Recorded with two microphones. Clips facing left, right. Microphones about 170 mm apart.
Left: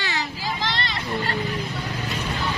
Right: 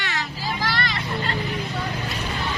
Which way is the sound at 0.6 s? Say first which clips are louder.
Right 3 dB; 25° left (ahead or behind).